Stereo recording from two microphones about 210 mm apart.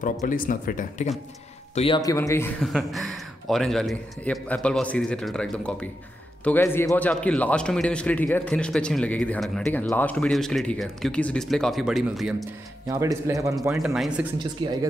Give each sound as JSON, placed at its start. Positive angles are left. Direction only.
{"t": 0.0, "sound": "speech", "side_deg": 40}
{"t": 2.0, "sound": "speech", "side_deg": 15}
{"t": 2.6, "sound": "a man's voice", "side_deg": 0}
{"t": 12.8, "sound": "a man's voice", "side_deg": -15}
{"t": 13.7, "sound": "a man's voice", "side_deg": 0}